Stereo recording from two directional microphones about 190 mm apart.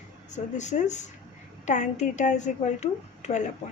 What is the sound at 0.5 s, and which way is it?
A woman's voice, 40° left (ahead or behind).